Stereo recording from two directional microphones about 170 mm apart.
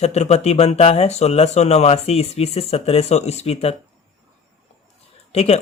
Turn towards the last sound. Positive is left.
turn(degrees=35)  # may be behind; listen again after turning